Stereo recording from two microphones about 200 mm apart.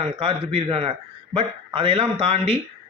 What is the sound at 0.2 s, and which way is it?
A man's voice, 30° right (ahead or behind).